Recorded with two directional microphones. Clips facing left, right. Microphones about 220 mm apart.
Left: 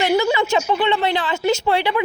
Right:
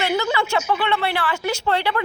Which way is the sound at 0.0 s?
10° left (ahead or behind).